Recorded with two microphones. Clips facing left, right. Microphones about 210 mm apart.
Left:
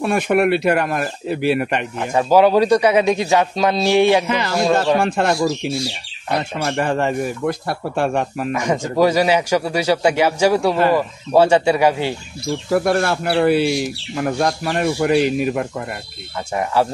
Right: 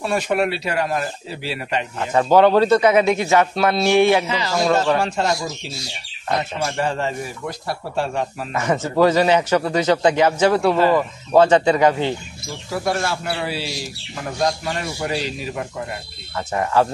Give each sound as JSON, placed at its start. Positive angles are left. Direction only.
{"t": 0.0, "sound": "speech", "side_deg": 55}
{"t": 2.0, "sound": "a man's voice", "side_deg": 10}
{"t": 4.3, "sound": "speech", "side_deg": 55}
{"t": 8.5, "sound": "a man's voice", "side_deg": 15}
{"t": 12.7, "sound": "speech", "side_deg": 60}